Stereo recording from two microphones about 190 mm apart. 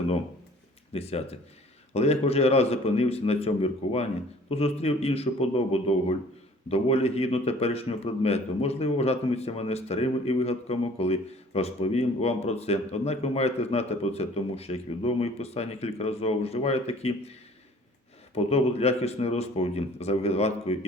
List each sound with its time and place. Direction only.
0.9 s a man's voice: 30° left (ahead or behind)
18.3 s a man's voice: 35° left (ahead or behind)